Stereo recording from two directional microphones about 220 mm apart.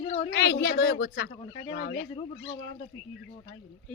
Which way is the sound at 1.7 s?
50° left (ahead or behind).